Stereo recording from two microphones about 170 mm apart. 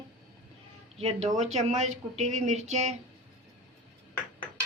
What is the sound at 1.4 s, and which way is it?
Speech, 40° right (ahead or behind).